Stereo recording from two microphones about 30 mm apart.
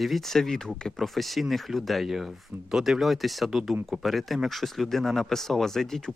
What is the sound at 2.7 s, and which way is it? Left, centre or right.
Speech, centre.